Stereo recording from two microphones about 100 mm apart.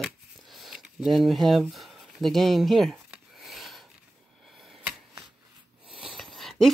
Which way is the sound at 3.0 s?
Centre (ahead or behind).